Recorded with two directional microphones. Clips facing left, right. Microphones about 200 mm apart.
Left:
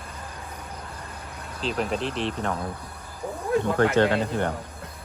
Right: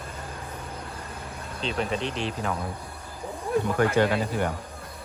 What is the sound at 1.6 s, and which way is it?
Speech, centre (ahead or behind).